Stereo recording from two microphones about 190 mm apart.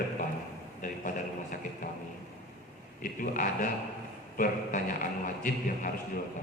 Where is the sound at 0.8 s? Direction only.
45° left (ahead or behind).